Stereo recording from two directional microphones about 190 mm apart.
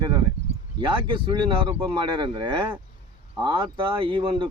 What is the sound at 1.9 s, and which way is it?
Speech, 25° right (ahead or behind).